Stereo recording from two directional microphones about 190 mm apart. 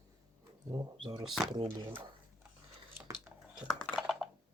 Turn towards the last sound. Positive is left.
turn(degrees=0)  # may be behind; listen again after turning